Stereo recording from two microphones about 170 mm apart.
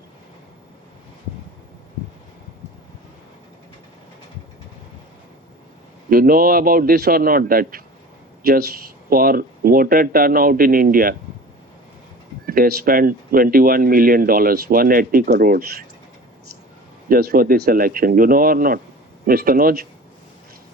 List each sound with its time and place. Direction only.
6.1 s speech: 60° right (ahead or behind)
9.0 s speech: 60° right (ahead or behind)
12.5 s speech: 60° right (ahead or behind)
17.1 s speech: 60° right (ahead or behind)